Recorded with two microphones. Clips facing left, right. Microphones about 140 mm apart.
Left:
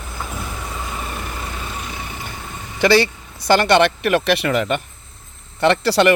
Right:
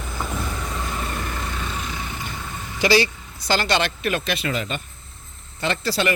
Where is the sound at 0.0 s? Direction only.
5° left (ahead or behind).